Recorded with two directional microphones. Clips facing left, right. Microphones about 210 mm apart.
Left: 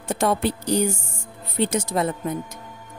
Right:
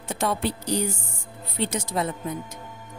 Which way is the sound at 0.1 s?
50° left (ahead or behind).